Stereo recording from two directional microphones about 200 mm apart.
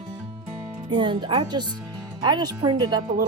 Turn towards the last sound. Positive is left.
turn(degrees=-20)  # may be behind; listen again after turning